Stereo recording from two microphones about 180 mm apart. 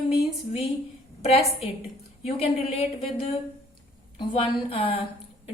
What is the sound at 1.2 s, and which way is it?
A woman's voice, 35° left (ahead or behind).